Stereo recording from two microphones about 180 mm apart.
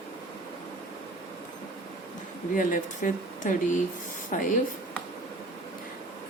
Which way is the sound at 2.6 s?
45° left (ahead or behind).